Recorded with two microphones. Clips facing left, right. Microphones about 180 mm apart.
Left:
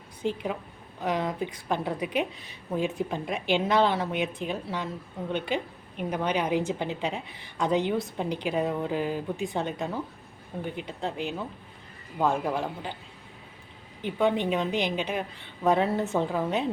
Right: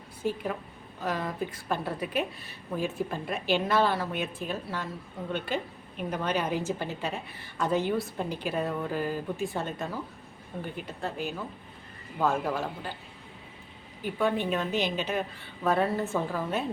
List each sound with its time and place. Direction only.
0.2 s a woman's voice: 20° left (ahead or behind)
14.0 s a woman's voice: 20° left (ahead or behind)